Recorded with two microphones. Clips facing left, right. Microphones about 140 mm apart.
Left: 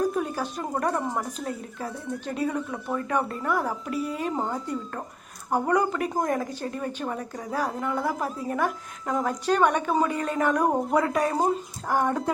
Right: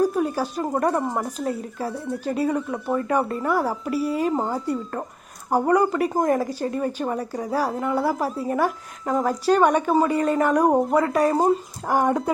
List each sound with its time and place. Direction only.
0.1 s a sound: 5° right (ahead or behind)
0.8 s speech: 5° right (ahead or behind)
10.6 s speech: 40° right (ahead or behind)
10.8 s speech: centre (ahead or behind)
11.9 s speech: 10° right (ahead or behind)